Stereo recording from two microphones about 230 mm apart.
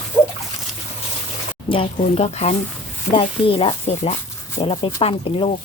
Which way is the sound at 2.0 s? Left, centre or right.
Left.